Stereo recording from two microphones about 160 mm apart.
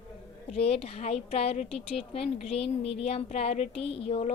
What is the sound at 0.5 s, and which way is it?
A woman's voice, 40° left (ahead or behind).